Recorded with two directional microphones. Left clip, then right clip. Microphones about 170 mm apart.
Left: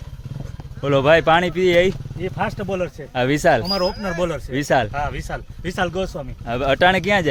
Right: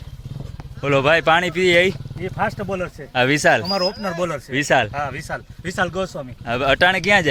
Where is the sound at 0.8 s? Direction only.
10° left (ahead or behind).